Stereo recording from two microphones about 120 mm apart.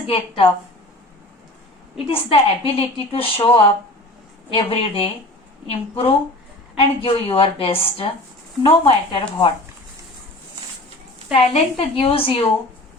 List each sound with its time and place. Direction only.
0.1 s a woman's voice: 50° left (ahead or behind)
2.0 s a woman's voice: 55° left (ahead or behind)
11.3 s a woman's voice: 55° left (ahead or behind)